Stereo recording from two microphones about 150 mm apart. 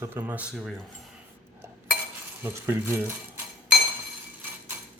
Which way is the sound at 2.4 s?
15° right (ahead or behind).